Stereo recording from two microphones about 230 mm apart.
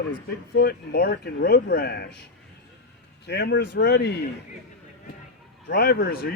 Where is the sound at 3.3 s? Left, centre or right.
Left.